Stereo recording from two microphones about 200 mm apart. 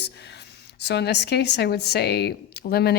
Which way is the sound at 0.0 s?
55° left (ahead or behind).